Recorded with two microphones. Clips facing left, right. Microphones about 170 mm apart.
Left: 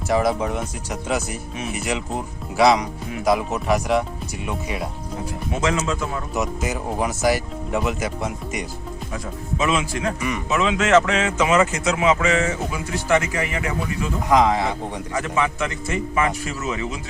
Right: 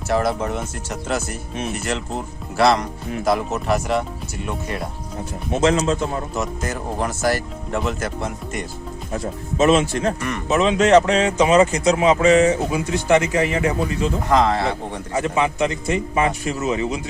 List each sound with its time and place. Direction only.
0.1 s speech: centre (ahead or behind)
5.5 s a man's voice: 30° right (ahead or behind)
6.3 s speech: centre (ahead or behind)
9.7 s speech: 30° right (ahead or behind)
10.2 s speech: 5° left (ahead or behind)
10.5 s speech: 30° right (ahead or behind)
12.4 s a man's voice: 20° right (ahead or behind)
14.3 s speech: 10° left (ahead or behind)
15.1 s a man's voice: 20° right (ahead or behind)